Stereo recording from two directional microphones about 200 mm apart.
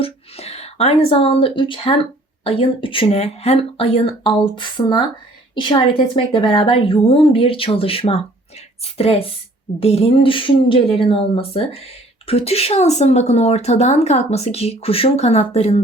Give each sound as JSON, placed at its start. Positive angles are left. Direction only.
{"t": 0.0, "sound": "speech", "side_deg": 30}